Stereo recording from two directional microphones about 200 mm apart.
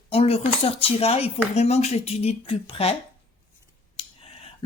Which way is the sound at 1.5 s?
35° left (ahead or behind).